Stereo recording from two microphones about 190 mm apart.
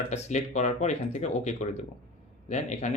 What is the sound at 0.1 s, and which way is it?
A man's voice, 35° left (ahead or behind).